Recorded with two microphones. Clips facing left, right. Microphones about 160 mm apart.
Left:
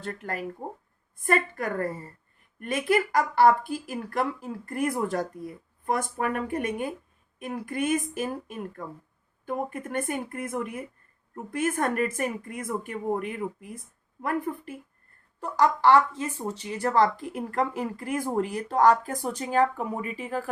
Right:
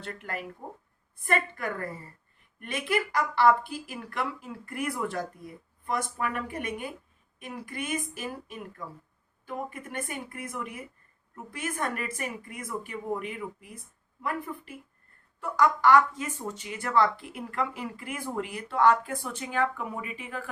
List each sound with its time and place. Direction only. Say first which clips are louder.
0.0 s speech: left 4 dB; 40° left (ahead or behind)
15.4 s speech: left 2 dB; 35° left (ahead or behind)